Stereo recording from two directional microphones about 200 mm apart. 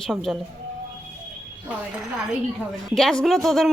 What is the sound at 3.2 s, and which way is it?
Speech, centre (ahead or behind).